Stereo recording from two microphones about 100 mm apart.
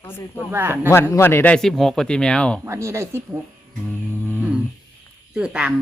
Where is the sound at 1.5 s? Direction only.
5° left (ahead or behind).